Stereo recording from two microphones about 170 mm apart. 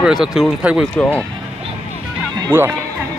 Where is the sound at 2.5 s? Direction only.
15° right (ahead or behind).